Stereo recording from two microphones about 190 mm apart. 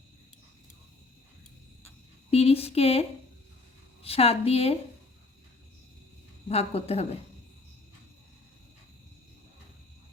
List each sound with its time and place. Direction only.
2.3 s speech: 30° left (ahead or behind)
6.5 s speech: 35° left (ahead or behind)